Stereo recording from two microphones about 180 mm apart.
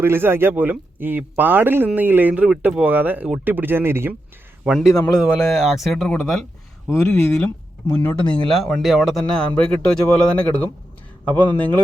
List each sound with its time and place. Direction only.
0.0 s a man's voice: 15° right (ahead or behind)
4.9 s a man's voice: 20° left (ahead or behind)
5.2 s speech: centre (ahead or behind)